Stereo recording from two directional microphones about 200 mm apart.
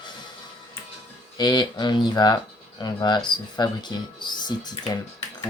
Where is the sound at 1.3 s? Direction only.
20° left (ahead or behind).